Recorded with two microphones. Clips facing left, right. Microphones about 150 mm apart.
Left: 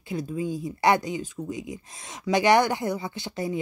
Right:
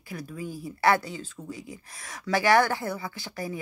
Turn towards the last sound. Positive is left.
turn(degrees=20)  # may be behind; listen again after turning